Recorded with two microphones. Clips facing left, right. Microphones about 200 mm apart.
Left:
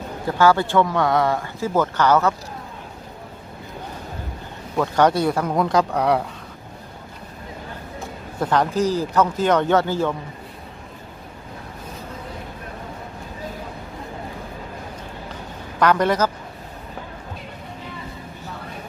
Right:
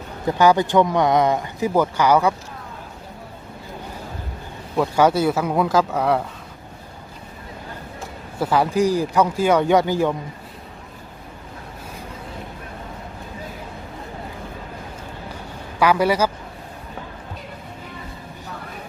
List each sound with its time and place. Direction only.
0.3 s speech: 15° right (ahead or behind)
4.8 s speech: 5° right (ahead or behind)
8.4 s speech: 10° right (ahead or behind)
15.8 s speech: 10° right (ahead or behind)